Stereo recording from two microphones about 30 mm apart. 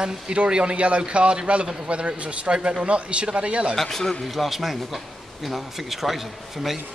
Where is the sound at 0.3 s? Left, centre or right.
Right.